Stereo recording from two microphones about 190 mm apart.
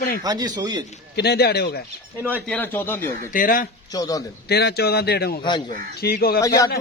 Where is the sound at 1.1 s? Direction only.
60° left (ahead or behind).